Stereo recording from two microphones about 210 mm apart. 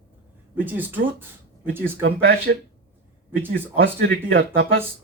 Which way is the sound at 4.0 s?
65° right (ahead or behind).